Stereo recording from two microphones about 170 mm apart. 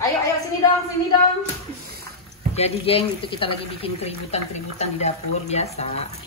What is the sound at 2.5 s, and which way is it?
Speech, 35° left (ahead or behind).